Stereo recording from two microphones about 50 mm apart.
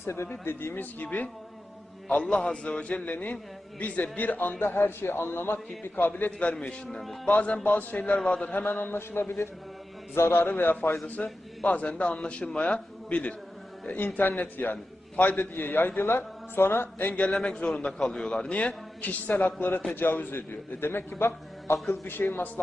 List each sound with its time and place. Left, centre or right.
0.0 s speech: left
0.3 s a man's voice: left
2.3 s a man's voice: centre
3.1 s a man's voice: left
4.6 s a man's voice: left
6.5 s a man's voice: left
8.8 s a man's voice: left
10.2 s a man's voice: left
10.4 s a man's voice: left
11.0 s a man's voice: left
13.8 s a man's voice: left
17.1 s a man's voice: left